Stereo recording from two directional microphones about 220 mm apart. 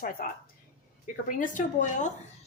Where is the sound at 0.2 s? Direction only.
40° left (ahead or behind).